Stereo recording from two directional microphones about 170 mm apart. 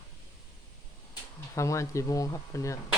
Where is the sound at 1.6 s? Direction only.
20° left (ahead or behind).